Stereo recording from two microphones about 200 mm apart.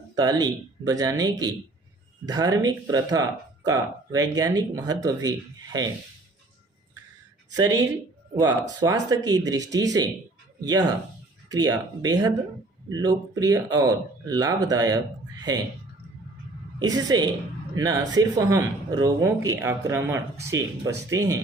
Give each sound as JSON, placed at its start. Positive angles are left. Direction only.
{"t": 0.2, "sound": "a man's voice", "side_deg": -20}
{"t": 7.5, "sound": "a man's voice", "side_deg": -20}
{"t": 16.8, "sound": "a man's voice", "side_deg": -20}